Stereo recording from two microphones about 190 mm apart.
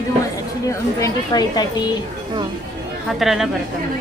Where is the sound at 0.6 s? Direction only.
15° left (ahead or behind).